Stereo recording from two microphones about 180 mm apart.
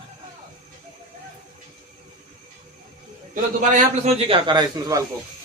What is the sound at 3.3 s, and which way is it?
Speech, 45° right (ahead or behind).